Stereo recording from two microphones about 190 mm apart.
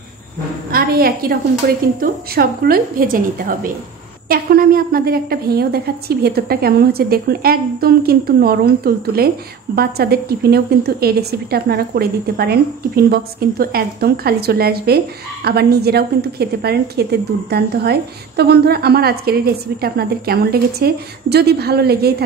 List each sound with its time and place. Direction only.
0.7 s a woman's voice: 50° right (ahead or behind)